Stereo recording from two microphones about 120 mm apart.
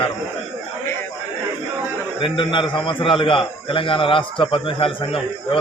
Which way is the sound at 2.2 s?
45° left (ahead or behind).